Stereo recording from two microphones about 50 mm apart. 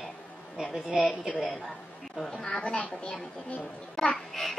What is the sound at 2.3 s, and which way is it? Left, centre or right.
A woman's voice, centre.